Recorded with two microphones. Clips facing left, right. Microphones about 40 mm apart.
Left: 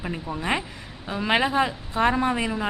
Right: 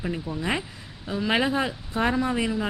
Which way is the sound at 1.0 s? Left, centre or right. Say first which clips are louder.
Left 1 dB; left.